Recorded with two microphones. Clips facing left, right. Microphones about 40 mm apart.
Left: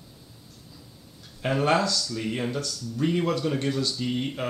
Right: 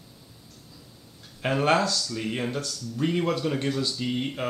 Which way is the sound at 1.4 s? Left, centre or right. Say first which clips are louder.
Even; centre.